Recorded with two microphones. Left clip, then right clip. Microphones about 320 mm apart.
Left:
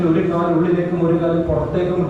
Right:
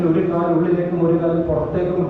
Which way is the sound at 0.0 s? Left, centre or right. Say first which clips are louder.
Left 1 dB; centre.